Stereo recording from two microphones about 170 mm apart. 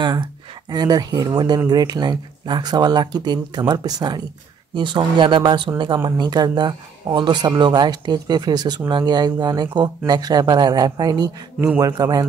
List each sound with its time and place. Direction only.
0.0 s speech: 25° right (ahead or behind)